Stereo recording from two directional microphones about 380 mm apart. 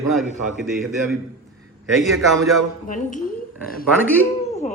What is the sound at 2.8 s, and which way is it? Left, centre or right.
Speech, centre.